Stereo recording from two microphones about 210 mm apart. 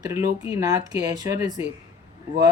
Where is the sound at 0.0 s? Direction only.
15° right (ahead or behind).